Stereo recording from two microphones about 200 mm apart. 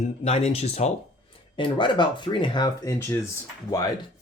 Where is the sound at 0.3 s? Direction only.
30° left (ahead or behind).